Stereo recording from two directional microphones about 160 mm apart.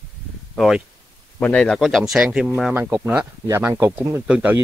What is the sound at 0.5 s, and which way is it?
A man's voice, centre (ahead or behind).